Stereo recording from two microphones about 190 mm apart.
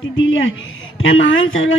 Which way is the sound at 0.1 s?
85° left.